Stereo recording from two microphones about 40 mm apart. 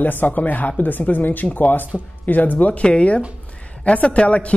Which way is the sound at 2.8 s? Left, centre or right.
Left.